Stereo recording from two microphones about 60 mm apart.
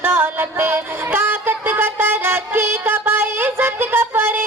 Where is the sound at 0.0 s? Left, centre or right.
Right.